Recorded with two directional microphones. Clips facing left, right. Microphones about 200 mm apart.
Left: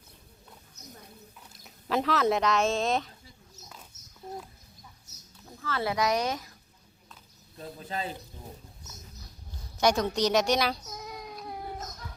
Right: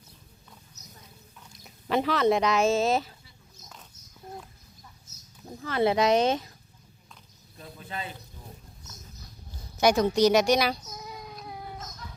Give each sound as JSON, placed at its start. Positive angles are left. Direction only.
{"t": 1.6, "sound": "speech", "side_deg": 0}
{"t": 5.5, "sound": "speech", "side_deg": -20}
{"t": 7.6, "sound": "a man's voice", "side_deg": 35}
{"t": 9.7, "sound": "a woman's voice", "side_deg": -5}